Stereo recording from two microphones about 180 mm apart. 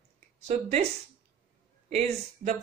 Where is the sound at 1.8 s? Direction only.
35° right (ahead or behind).